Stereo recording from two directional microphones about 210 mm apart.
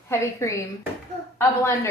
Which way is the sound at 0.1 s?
15° left (ahead or behind).